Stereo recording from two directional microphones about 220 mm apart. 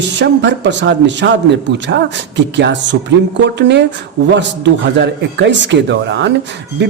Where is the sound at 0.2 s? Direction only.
55° right (ahead or behind).